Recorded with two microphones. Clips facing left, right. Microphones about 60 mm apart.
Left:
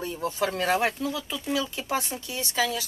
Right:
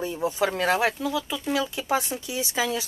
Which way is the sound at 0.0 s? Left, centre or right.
Centre.